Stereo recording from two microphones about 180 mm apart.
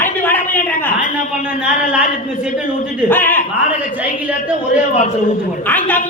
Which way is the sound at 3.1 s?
10° left (ahead or behind).